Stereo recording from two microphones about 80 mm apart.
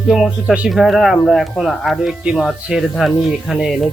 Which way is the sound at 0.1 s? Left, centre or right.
Centre.